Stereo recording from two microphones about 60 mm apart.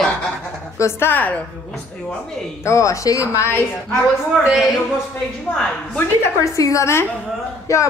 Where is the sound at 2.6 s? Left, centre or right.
Left.